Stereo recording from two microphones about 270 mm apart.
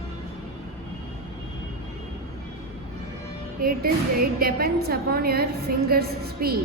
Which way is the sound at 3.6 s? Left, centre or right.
Right.